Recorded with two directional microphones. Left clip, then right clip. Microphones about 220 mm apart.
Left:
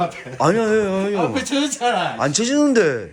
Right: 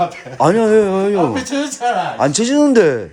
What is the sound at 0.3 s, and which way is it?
Speech, 25° right (ahead or behind).